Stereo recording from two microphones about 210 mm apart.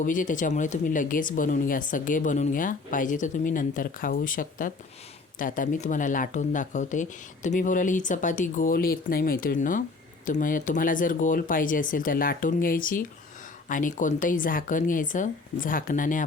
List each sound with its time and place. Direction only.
0.0 s speech: 40° left (ahead or behind)